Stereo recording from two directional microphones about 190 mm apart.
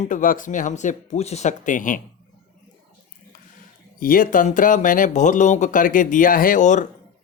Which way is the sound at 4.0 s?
50° left (ahead or behind).